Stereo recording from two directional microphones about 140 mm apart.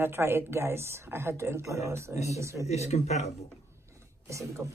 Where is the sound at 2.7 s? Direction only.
50° left (ahead or behind).